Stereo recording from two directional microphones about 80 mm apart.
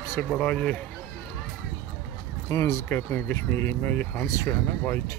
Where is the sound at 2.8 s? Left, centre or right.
Left.